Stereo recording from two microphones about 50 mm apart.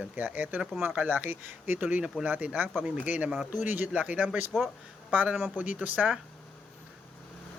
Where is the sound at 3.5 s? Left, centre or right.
Right.